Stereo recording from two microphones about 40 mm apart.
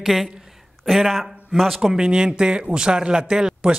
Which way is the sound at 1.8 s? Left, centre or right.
Centre.